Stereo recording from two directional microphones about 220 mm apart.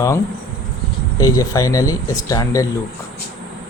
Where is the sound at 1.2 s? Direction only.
15° left (ahead or behind).